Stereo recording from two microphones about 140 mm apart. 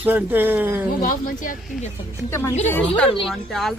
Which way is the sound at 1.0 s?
75° left (ahead or behind).